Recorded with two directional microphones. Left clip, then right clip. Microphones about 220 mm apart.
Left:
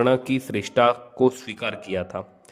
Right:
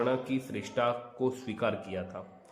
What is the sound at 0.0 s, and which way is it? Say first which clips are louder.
Speech: left 10 dB; 50° left (ahead or behind).